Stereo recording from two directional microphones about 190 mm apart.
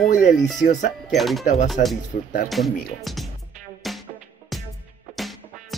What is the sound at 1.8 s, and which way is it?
Speech, 40° left (ahead or behind).